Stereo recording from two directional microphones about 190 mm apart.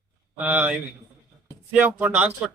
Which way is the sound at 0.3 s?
10° right (ahead or behind).